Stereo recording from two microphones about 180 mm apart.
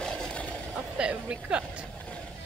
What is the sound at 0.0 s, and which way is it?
Vehicle, 5° left (ahead or behind).